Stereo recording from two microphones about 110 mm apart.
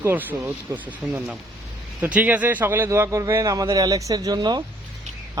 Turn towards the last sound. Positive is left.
turn(degrees=-40)  # may be behind; listen again after turning